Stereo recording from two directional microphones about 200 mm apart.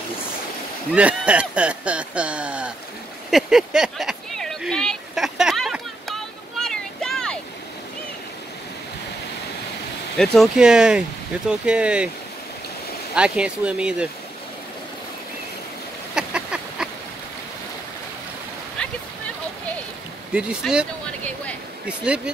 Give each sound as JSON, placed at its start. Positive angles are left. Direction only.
{"t": 0.9, "sound": "speech", "side_deg": -5}
{"t": 3.3, "sound": "a sound", "side_deg": 0}
{"t": 6.6, "sound": "vehicle", "side_deg": 0}
{"t": 10.1, "sound": "speech", "side_deg": 0}
{"t": 13.1, "sound": "speech", "side_deg": -5}
{"t": 16.2, "sound": "a sound", "side_deg": -5}
{"t": 20.3, "sound": "speech", "side_deg": -5}
{"t": 21.8, "sound": "speech", "side_deg": -5}